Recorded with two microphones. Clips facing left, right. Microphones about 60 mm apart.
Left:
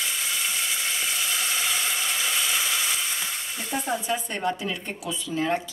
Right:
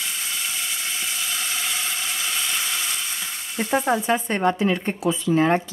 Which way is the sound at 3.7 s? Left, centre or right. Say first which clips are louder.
Right 7 dB; right.